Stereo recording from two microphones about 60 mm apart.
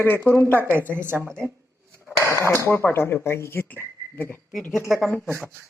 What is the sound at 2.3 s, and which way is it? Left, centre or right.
Speech, left.